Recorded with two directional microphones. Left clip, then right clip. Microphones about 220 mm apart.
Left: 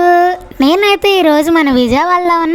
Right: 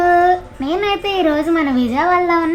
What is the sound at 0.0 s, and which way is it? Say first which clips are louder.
A woman's voice: left 3 dB; 40° left (ahead or behind).